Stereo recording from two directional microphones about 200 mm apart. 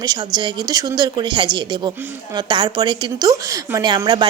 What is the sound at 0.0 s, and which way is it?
A woman's voice, 20° right (ahead or behind).